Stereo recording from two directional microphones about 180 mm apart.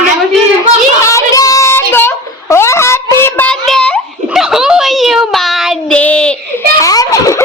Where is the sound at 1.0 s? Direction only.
20° left (ahead or behind).